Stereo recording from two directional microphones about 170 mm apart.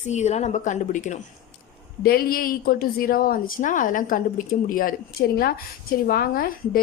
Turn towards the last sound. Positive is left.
turn(degrees=60)  # may be behind; listen again after turning